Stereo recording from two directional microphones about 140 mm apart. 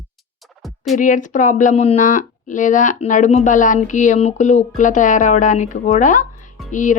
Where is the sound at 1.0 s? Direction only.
65° left (ahead or behind).